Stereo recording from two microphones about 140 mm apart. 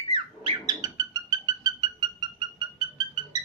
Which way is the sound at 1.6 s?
30° right (ahead or behind).